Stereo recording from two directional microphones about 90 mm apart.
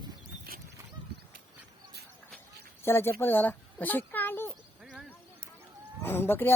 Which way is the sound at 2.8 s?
25° left (ahead or behind).